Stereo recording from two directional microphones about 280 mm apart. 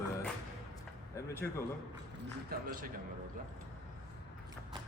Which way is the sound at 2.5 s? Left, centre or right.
Right.